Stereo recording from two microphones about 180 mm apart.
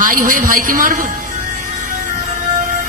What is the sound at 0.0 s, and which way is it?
Music, 50° right (ahead or behind).